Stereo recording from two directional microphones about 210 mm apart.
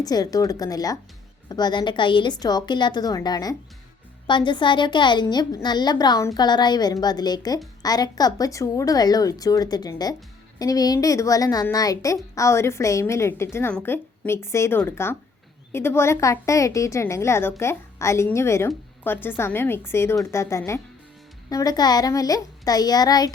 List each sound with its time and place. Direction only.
0.0 s a woman's voice: 20° left (ahead or behind)